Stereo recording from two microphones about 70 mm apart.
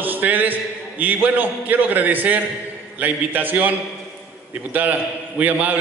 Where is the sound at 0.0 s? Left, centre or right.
Right.